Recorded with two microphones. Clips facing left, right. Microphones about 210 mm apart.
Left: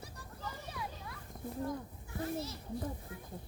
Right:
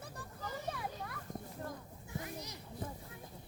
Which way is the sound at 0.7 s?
55° right (ahead or behind).